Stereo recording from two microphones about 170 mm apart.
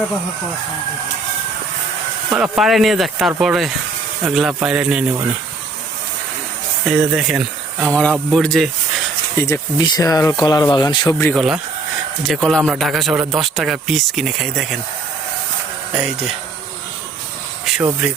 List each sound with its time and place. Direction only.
2.3 s speech: 5° right (ahead or behind)
6.8 s speech: 5° right (ahead or behind)
9.4 s speech: 20° left (ahead or behind)
11.0 s speech: 10° left (ahead or behind)
11.3 s speech: centre (ahead or behind)
15.9 s speech: 5° right (ahead or behind)
17.7 s a sound: centre (ahead or behind)